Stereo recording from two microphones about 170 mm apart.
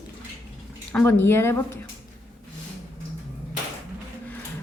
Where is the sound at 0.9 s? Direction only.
10° left (ahead or behind).